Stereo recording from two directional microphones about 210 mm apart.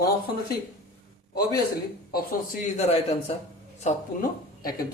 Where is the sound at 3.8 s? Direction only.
35° left (ahead or behind).